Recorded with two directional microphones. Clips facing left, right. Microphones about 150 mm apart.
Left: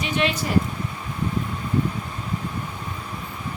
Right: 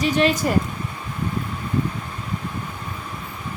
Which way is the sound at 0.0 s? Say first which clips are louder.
Right 5 dB; 40° right (ahead or behind).